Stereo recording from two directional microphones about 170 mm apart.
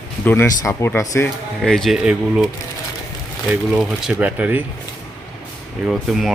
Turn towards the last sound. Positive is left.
turn(degrees=0)  # may be behind; listen again after turning